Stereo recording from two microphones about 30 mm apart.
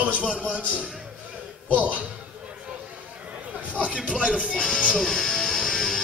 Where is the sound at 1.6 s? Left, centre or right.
Right.